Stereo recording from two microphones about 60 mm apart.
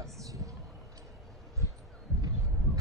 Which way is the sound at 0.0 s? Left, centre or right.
Right.